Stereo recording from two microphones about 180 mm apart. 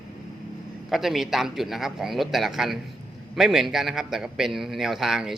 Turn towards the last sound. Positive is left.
turn(degrees=-5)  # may be behind; listen again after turning